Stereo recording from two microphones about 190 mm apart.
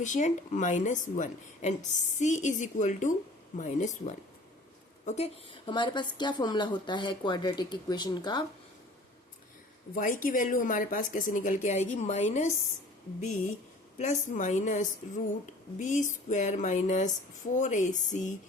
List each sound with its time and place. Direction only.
0.0 s a woman's voice: 40° left (ahead or behind); by 8.4 s 20° left (ahead or behind)
9.9 s speech: 45° left (ahead or behind)
14.0 s a woman's voice: 40° left (ahead or behind)